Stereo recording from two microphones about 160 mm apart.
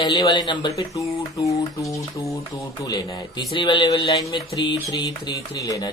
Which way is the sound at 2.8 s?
25° left (ahead or behind).